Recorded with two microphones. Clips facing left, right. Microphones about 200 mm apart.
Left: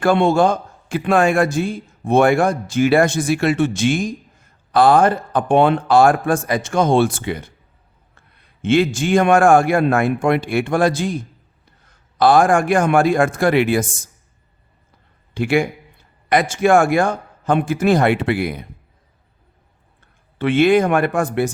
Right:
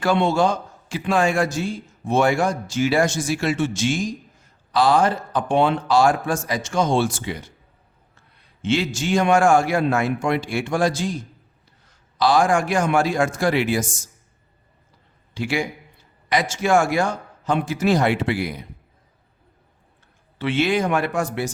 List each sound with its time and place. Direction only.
0.0 s a man's voice: 50° left (ahead or behind)
15.4 s a man's voice: 55° left (ahead or behind)
20.4 s speech: 55° left (ahead or behind)